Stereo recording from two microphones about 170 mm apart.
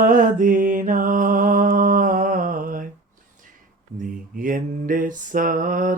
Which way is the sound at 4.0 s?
55° right (ahead or behind).